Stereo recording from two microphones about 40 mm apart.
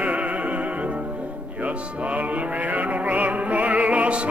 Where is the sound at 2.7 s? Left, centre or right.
Right.